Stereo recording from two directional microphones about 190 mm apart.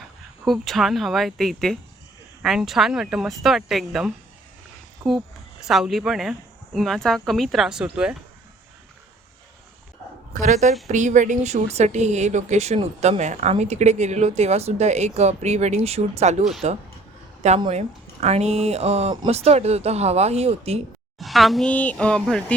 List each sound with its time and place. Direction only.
0.4 s speech: centre (ahead or behind)
5.0 s speech: 15° right (ahead or behind)
5.6 s speech: centre (ahead or behind)
10.4 s a woman's voice: 40° right (ahead or behind)
21.2 s speech: centre (ahead or behind)